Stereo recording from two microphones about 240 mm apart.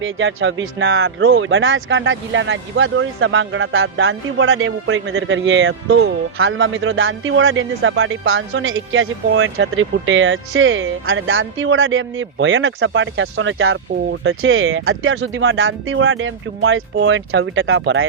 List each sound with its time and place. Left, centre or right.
0.0 s speech: right